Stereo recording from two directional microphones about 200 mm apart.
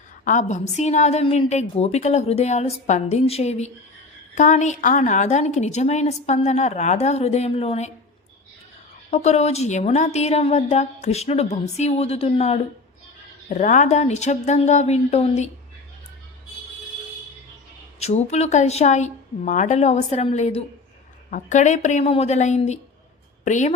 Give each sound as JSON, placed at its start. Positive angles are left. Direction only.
{"t": 0.3, "sound": "a woman's voice", "side_deg": 40}
{"t": 9.0, "sound": "a woman's voice", "side_deg": 35}
{"t": 18.0, "sound": "a woman's voice", "side_deg": 35}